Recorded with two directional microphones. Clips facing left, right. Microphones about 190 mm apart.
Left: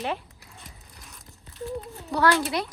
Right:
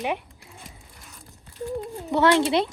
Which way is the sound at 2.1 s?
25° right (ahead or behind).